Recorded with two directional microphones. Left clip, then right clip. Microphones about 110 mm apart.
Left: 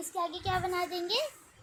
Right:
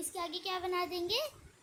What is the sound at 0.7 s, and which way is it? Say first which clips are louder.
Speech: left 3 dB; 55° right (ahead or behind).